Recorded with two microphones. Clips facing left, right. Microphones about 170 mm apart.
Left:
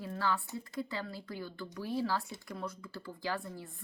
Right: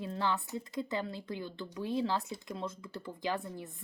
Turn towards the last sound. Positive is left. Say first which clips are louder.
# right 2 dB
turn(degrees=-20)  # may be behind; listen again after turning